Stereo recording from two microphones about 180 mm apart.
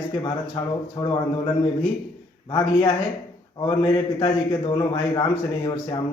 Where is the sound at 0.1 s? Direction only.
25° left (ahead or behind).